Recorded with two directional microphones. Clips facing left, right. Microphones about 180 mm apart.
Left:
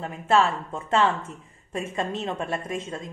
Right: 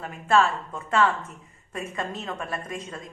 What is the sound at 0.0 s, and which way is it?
A woman's voice, 25° left (ahead or behind).